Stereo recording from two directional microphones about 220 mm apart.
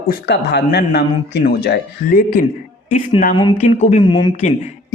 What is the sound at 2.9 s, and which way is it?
A man's voice, 30° left (ahead or behind).